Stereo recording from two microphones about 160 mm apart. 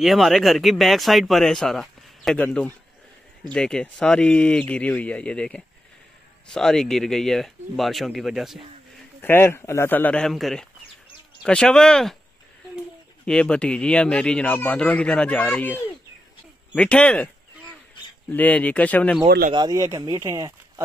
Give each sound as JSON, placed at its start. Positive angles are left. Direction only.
{"t": 0.0, "sound": "speech", "side_deg": 0}
{"t": 9.2, "sound": "speech", "side_deg": 15}
{"t": 13.2, "sound": "speech", "side_deg": 5}
{"t": 18.3, "sound": "speech", "side_deg": 10}
{"t": 19.2, "sound": "speech", "side_deg": -70}
{"t": 19.5, "sound": "speech", "side_deg": -25}